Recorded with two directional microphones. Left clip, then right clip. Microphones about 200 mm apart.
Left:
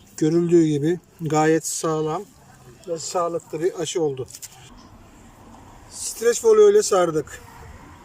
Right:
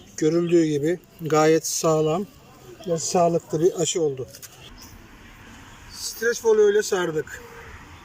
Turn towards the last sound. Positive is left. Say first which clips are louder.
# left 5 dB
turn(degrees=15)  # may be behind; listen again after turning